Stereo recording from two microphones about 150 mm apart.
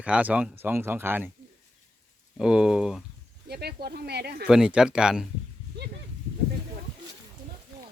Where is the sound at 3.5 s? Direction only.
90° right.